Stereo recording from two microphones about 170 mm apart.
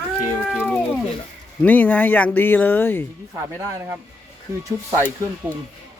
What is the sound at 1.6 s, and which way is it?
Speech, 10° left (ahead or behind).